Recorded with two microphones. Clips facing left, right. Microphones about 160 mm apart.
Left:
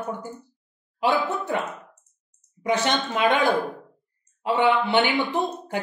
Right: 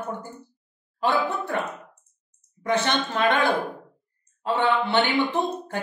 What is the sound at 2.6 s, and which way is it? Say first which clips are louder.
Speech: left 1 dB; 10° left (ahead or behind).